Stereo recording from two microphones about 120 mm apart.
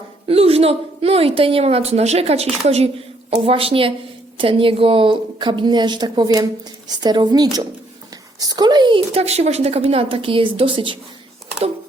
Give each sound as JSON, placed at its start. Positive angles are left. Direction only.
{"t": 0.3, "sound": "a woman's voice", "side_deg": -55}
{"t": 9.1, "sound": "a woman's voice", "side_deg": -60}